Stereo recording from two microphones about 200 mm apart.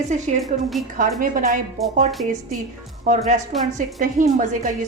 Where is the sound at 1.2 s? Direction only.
40° right (ahead or behind).